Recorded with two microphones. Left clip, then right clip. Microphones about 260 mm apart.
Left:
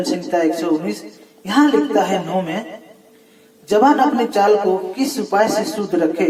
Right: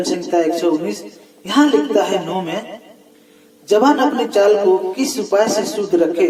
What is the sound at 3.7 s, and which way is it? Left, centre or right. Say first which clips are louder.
Speech: even; right.